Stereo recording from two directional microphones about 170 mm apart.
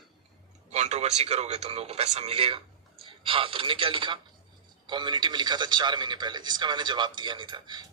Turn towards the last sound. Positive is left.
turn(degrees=-25)  # may be behind; listen again after turning